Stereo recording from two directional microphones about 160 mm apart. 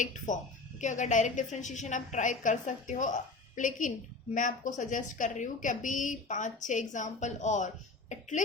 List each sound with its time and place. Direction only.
0.0 s a woman's voice: 50° left (ahead or behind)